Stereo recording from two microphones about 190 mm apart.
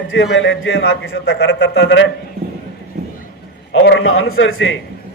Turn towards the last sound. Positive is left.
turn(degrees=90)